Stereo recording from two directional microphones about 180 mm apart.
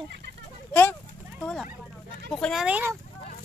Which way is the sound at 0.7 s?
10° left (ahead or behind).